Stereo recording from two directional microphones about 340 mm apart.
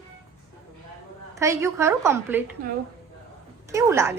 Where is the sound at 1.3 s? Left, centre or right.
Centre.